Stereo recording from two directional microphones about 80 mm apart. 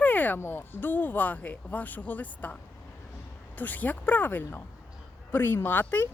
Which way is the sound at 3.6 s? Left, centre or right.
Left.